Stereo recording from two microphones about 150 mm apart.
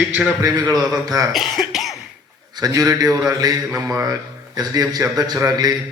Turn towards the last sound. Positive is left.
turn(degrees=-25)  # may be behind; listen again after turning